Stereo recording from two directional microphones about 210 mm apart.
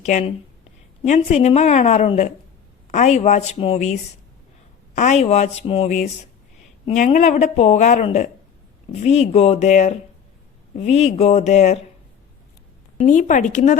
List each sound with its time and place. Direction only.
0.0 s speech: 35° left (ahead or behind)
4.9 s speech: 35° left (ahead or behind)
13.0 s speech: 35° left (ahead or behind)